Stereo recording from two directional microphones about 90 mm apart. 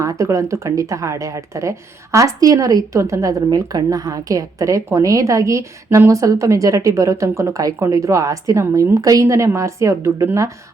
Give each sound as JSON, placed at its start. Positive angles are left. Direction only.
{"t": 0.0, "sound": "a woman's voice", "side_deg": -35}